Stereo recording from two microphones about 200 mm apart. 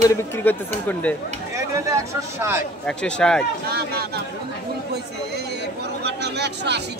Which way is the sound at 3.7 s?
50° right (ahead or behind).